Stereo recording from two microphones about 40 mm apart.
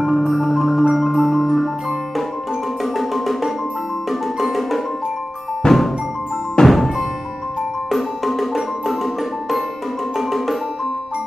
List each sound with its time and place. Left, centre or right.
0.0 s music: centre
2.8 s music: centre
5.6 s music: centre
6.6 s music: centre
7.9 s music: centre